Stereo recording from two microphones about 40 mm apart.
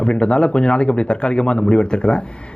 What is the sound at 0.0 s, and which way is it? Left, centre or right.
Speech, left.